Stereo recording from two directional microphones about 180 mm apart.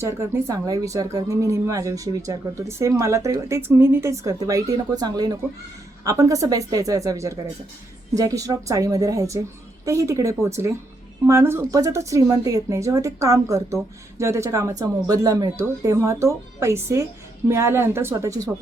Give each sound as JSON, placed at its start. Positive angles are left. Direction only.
{"t": 0.0, "sound": "a woman's voice", "side_deg": -15}